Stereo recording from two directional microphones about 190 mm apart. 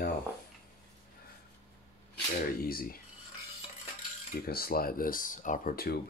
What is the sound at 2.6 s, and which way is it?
Speech, 50° left (ahead or behind).